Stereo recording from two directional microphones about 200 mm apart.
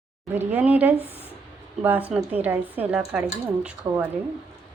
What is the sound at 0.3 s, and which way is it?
Speech, 10° right (ahead or behind).